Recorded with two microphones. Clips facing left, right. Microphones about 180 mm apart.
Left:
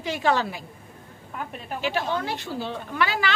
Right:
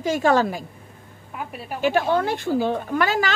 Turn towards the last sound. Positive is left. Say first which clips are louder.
# right 4 dB
turn(degrees=-45)  # may be behind; listen again after turning